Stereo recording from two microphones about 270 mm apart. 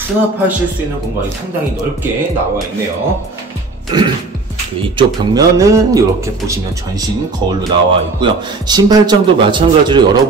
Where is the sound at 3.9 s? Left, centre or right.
Centre.